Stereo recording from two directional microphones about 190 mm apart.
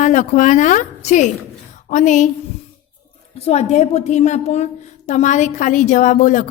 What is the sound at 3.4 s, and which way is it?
A woman's voice, 35° left (ahead or behind).